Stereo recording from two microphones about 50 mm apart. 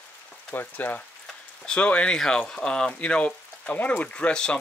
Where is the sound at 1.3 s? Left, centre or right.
Left.